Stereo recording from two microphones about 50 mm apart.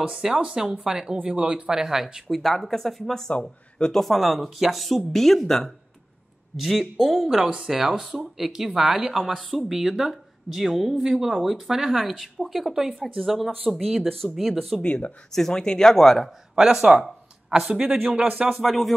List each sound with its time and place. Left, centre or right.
0.0 s speech: centre
2.2 s a woman's voice: centre
3.3 s speech: left
3.9 s a woman's voice: centre
7.3 s a woman's voice: centre
14.8 s speech: left
15.3 s speech: centre
16.5 s speech: centre
17.8 s speech: right
18.5 s a woman's voice: centre